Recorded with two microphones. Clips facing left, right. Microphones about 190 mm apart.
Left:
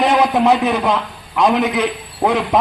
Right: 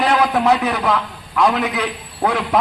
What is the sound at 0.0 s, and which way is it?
A man's voice, 20° left (ahead or behind).